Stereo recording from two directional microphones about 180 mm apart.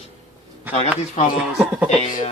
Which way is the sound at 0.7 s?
10° right (ahead or behind).